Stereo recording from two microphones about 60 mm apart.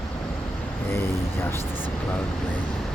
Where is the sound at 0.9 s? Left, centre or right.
Left.